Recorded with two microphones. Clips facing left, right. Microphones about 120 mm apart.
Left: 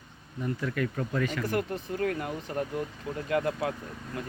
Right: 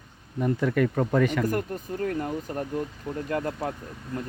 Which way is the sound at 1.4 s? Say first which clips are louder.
Right 3 dB; 45° right (ahead or behind).